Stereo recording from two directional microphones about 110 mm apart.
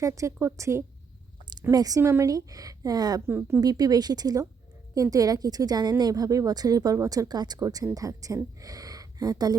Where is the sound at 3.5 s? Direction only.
35° right (ahead or behind).